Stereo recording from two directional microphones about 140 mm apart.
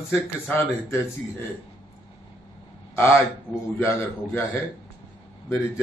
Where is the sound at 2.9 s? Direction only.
15° left (ahead or behind).